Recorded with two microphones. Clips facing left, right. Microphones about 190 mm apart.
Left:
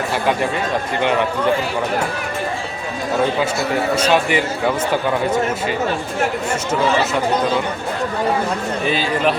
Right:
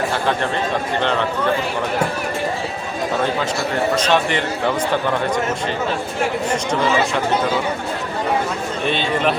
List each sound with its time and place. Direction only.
3.9 s a man's voice: 10° left (ahead or behind)
8.8 s a man's voice: 5° left (ahead or behind)